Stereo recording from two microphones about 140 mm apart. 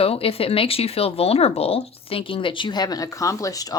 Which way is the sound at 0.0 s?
45° left (ahead or behind).